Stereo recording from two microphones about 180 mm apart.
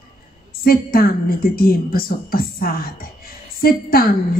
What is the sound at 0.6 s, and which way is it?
Speech, 55° left (ahead or behind).